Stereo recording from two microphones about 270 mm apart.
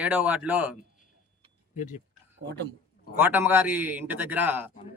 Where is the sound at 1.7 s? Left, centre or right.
Left.